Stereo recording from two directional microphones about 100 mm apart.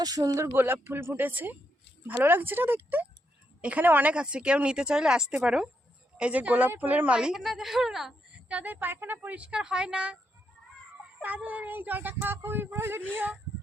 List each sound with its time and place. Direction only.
0.0 s a woman's voice: 40° right (ahead or behind); by 10.2 s 10° right (ahead or behind)
11.2 s speech: 15° right (ahead or behind)